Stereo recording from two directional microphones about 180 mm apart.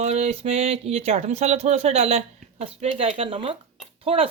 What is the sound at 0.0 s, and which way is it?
Speech, 40° right (ahead or behind).